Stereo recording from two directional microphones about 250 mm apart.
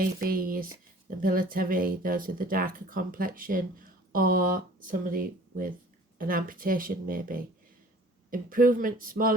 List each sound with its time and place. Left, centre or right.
0.0 s speech: right